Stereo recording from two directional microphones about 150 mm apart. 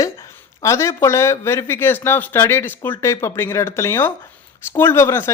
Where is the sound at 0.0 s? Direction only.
20° left (ahead or behind).